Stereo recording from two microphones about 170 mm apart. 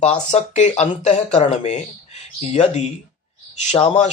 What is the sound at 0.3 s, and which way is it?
Speech, 40° left (ahead or behind).